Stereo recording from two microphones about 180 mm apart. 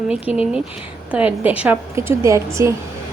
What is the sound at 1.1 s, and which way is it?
A woman's voice, 10° right (ahead or behind).